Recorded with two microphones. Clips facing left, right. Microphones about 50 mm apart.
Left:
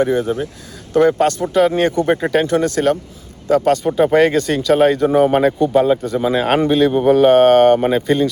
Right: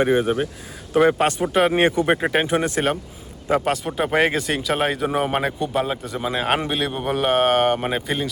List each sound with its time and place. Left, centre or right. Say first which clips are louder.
0.0 s speech: left 2 dB; right; by 8.3 s centre